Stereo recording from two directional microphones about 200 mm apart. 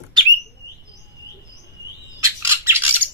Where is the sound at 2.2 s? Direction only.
15° right (ahead or behind).